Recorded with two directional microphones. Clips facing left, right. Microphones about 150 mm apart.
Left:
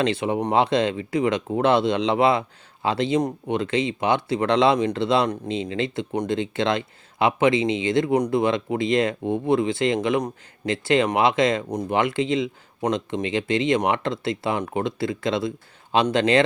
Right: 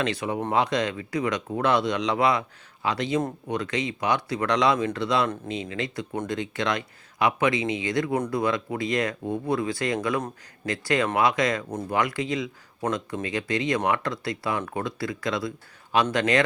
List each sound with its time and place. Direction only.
0.0 s speech: 25° left (ahead or behind)